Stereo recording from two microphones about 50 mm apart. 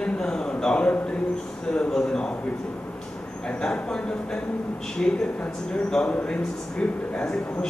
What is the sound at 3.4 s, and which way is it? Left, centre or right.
A man's voice, centre.